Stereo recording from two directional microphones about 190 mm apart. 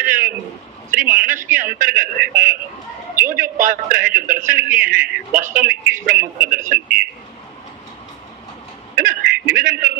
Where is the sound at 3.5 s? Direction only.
45° right (ahead or behind).